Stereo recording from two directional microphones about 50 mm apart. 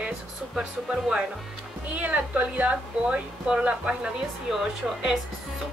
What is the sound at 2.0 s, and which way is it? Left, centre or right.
Speech, right.